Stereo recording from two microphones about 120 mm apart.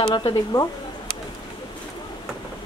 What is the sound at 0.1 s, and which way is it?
Speech, 40° left (ahead or behind).